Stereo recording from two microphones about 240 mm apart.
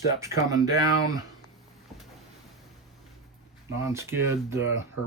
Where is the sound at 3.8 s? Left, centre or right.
Centre.